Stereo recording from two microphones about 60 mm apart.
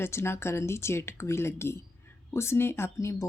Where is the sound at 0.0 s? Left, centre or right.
Left.